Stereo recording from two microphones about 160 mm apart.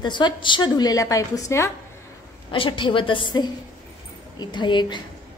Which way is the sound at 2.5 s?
30° left (ahead or behind).